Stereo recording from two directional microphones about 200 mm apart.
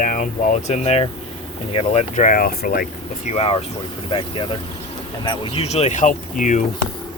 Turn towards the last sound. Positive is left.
turn(degrees=40)  # may be behind; listen again after turning